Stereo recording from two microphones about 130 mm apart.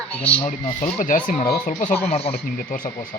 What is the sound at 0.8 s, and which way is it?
Speech, 85° left.